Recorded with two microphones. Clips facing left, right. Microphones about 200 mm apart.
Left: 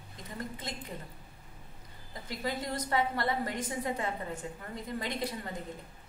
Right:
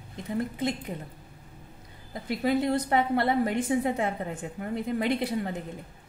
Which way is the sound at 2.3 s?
60° right (ahead or behind).